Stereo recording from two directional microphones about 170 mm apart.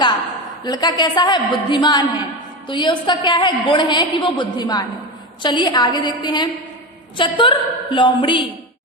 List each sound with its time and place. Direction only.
0.6 s a woman's voice: 25° left (ahead or behind)